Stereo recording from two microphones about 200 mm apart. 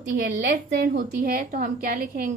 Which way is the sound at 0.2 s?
50° right (ahead or behind).